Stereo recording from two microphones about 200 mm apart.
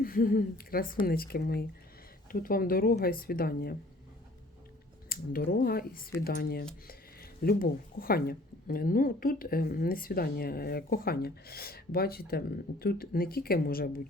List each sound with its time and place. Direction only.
0.0 s speech: 45° left (ahead or behind)
5.0 s speech: 50° left (ahead or behind)